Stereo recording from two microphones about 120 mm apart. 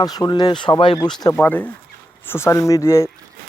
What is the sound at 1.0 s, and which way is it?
Speech, 35° left (ahead or behind).